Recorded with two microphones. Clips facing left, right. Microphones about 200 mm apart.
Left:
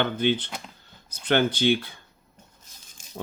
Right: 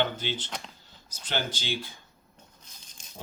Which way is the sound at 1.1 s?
60° left (ahead or behind).